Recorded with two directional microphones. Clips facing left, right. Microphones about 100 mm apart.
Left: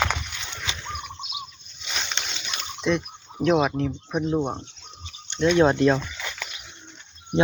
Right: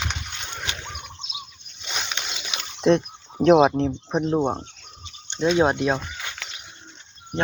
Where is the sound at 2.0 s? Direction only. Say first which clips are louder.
Right 1 dB; 5° right (ahead or behind).